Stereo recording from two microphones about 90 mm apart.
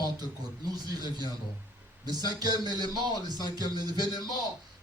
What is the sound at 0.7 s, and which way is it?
Beatboxing, 45° right (ahead or behind).